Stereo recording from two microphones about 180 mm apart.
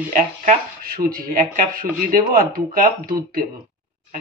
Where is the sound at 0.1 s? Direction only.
50° right (ahead or behind).